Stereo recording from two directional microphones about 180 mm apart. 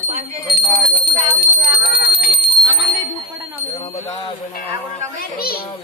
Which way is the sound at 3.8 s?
25° left (ahead or behind).